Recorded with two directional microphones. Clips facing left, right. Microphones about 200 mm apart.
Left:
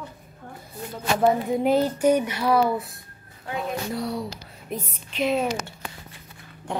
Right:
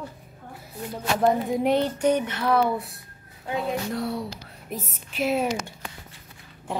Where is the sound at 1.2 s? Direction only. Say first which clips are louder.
Left 1 dB; centre (ahead or behind).